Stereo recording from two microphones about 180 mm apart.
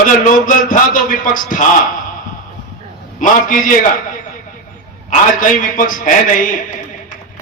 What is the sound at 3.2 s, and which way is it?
Speech, 45° left (ahead or behind).